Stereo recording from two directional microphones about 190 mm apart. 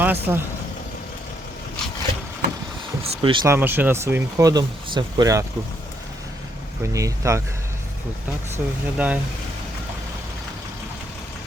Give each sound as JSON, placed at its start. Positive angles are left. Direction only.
{"t": 0.0, "sound": "speech", "side_deg": -10}
{"t": 3.0, "sound": "speech", "side_deg": -25}
{"t": 3.5, "sound": "speech", "side_deg": -10}
{"t": 6.8, "sound": "speech", "side_deg": -15}
{"t": 8.5, "sound": "speech", "side_deg": -10}